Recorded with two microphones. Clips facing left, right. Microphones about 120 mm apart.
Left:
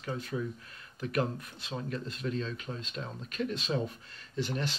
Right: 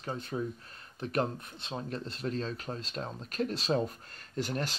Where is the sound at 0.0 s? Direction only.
35° right (ahead or behind).